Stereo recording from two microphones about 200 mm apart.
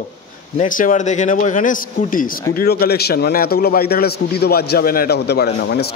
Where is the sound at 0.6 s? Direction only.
40° left (ahead or behind).